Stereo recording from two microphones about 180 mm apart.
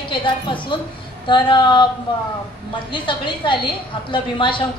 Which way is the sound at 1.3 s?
25° left (ahead or behind).